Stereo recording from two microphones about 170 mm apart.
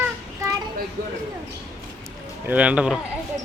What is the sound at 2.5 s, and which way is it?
Speech, 10° right (ahead or behind).